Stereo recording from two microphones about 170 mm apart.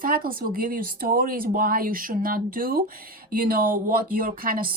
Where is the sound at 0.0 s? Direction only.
55° right (ahead or behind).